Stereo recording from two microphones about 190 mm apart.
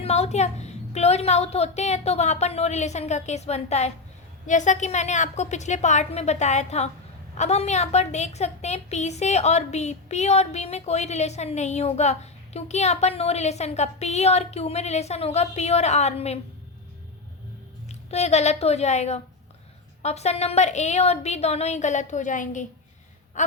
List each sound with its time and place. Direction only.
0.0 s a woman's voice: 35° left (ahead or behind)
17.8 s a woman's voice: 35° left (ahead or behind)